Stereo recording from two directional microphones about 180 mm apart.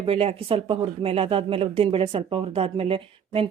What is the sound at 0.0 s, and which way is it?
Speech, 35° right (ahead or behind).